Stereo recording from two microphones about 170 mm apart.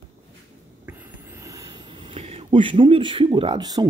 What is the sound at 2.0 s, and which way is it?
Speech, 35° right (ahead or behind).